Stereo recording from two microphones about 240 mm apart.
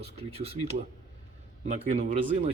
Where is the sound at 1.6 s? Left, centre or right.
Right.